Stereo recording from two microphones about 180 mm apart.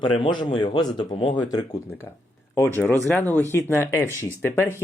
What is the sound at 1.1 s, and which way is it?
Speech, 35° left (ahead or behind).